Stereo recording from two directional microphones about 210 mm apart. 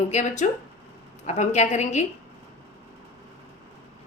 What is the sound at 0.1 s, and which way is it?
A woman's voice, 35° left (ahead or behind).